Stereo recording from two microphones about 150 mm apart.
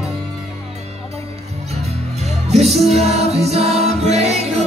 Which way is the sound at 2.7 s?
45° right (ahead or behind).